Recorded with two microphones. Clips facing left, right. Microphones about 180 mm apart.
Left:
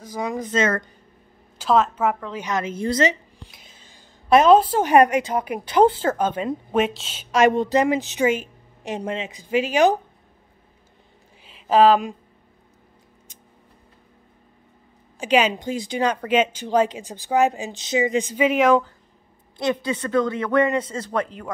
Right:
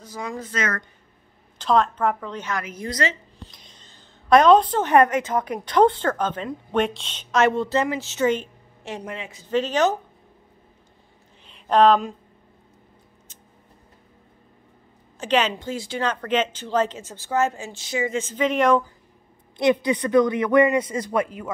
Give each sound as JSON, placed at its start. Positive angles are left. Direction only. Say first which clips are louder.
{"t": 0.0, "sound": "speech", "louder": "left 5 dB", "side_deg": 15}
{"t": 1.6, "sound": "a woman's voice", "louder": "left 1 dB", "side_deg": 5}
{"t": 2.4, "sound": "speech", "louder": "left 7 dB", "side_deg": 25}
{"t": 3.1, "sound": "a sound", "louder": "left 5 dB", "side_deg": 10}
{"t": 5.3, "sound": "a woman's voice", "louder": "even", "side_deg": 10}
{"t": 8.9, "sound": "a woman's voice", "louder": "left 6 dB", "side_deg": 20}
{"t": 11.4, "sound": "speech", "louder": "left 1 dB", "side_deg": 5}
{"t": 15.1, "sound": "a woman's voice", "louder": "left 2 dB", "side_deg": 10}
{"t": 19.5, "sound": "speech", "louder": "right 4 dB", "side_deg": -15}